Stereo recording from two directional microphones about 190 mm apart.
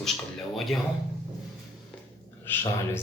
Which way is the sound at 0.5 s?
Centre (ahead or behind).